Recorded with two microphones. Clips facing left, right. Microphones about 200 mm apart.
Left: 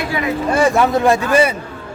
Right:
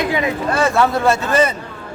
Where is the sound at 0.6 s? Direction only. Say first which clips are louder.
Left 2 dB; 15° left (ahead or behind).